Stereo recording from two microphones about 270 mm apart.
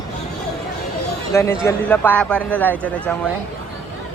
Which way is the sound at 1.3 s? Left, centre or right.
Centre.